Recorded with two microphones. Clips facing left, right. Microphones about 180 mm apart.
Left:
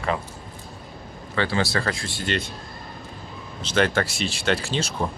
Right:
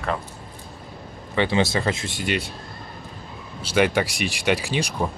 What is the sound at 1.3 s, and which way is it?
Speech, 20° right (ahead or behind).